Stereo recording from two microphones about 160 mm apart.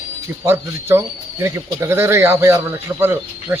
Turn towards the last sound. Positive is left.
turn(degrees=-15)  # may be behind; listen again after turning